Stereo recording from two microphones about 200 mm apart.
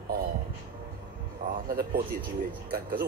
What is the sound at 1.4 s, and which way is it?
Speech, 45° right (ahead or behind).